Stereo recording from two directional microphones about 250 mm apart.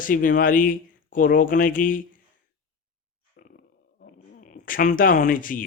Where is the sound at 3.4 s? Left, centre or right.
Left.